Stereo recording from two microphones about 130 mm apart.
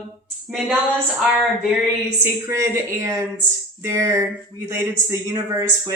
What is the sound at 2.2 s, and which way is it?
Speech, 20° right (ahead or behind).